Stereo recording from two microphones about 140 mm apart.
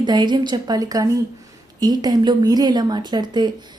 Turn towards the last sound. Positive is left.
turn(degrees=-30)  # may be behind; listen again after turning